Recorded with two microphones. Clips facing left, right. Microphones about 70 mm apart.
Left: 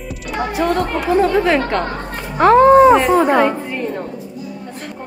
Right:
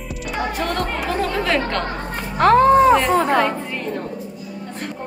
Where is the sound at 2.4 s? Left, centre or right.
Centre.